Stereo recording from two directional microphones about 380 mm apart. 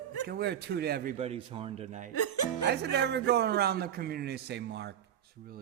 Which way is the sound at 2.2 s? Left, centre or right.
Left.